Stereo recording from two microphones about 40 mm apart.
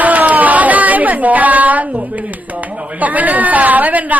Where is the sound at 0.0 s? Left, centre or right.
Right.